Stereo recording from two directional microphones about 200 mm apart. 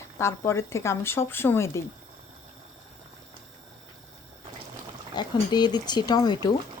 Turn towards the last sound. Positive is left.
turn(degrees=20)  # may be behind; listen again after turning